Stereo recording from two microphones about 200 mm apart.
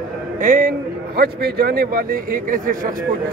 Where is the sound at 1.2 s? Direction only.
55° right (ahead or behind).